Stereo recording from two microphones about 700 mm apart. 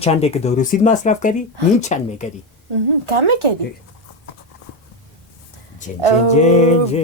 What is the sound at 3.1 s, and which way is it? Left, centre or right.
Speech, right.